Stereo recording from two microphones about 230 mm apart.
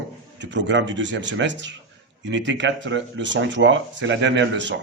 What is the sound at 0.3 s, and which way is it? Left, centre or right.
Speech, right.